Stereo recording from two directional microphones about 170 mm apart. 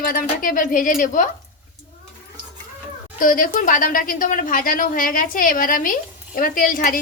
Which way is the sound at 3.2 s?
55° left (ahead or behind).